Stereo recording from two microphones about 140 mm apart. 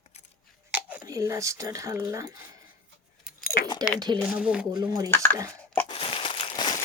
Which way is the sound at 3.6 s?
35° left (ahead or behind).